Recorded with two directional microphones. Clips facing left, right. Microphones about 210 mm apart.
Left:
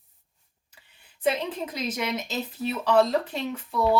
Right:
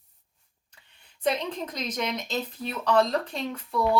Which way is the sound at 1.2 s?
5° left (ahead or behind).